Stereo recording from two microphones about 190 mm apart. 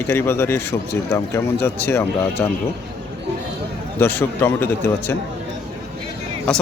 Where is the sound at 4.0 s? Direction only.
10° left (ahead or behind).